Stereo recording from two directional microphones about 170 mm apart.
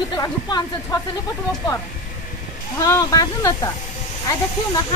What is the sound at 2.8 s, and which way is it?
Speech, 20° left (ahead or behind).